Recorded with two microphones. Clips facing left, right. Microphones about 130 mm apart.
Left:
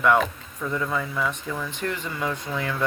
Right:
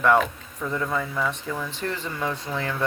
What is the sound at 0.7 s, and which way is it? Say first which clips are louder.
Speech: even; 15° right (ahead or behind).